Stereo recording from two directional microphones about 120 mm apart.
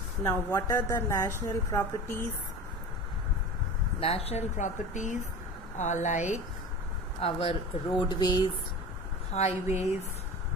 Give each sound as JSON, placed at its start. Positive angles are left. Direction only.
{"t": 0.2, "sound": "a woman's voice", "side_deg": 25}
{"t": 4.0, "sound": "speech", "side_deg": 55}
{"t": 7.2, "sound": "speech", "side_deg": 50}
{"t": 7.9, "sound": "speech", "side_deg": 40}
{"t": 9.3, "sound": "speech", "side_deg": 65}